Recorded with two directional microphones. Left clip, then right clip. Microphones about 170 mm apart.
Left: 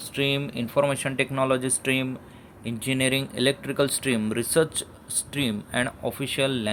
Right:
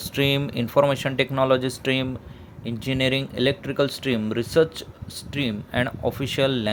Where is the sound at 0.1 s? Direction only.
25° right (ahead or behind).